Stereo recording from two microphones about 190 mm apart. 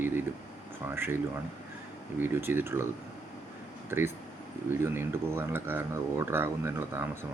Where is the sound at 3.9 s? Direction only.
10° right (ahead or behind).